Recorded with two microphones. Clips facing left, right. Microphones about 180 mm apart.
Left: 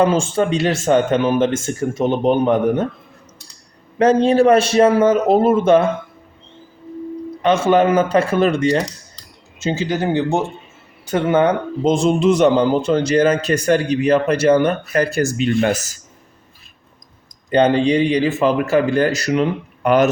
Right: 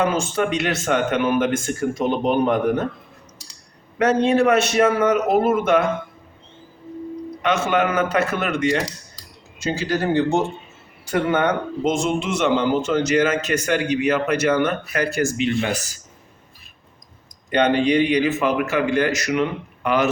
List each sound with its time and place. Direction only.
0.0 s speech: 30° left (ahead or behind)
3.9 s speech: 30° left (ahead or behind)
7.4 s speech: 30° left (ahead or behind)
9.6 s speech: 20° left (ahead or behind); by 15.8 s 40° left (ahead or behind)
17.5 s speech: 30° left (ahead or behind)